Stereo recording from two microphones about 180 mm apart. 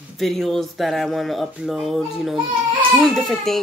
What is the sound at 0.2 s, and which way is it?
Speech, centre (ahead or behind).